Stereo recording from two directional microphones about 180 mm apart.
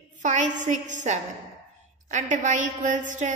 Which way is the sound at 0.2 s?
45° right (ahead or behind).